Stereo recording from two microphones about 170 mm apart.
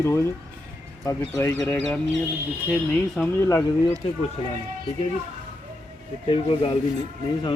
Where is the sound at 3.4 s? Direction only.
15° left (ahead or behind).